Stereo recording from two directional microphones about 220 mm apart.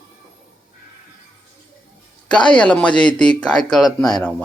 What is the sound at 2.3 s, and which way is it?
Speech, 20° left (ahead or behind).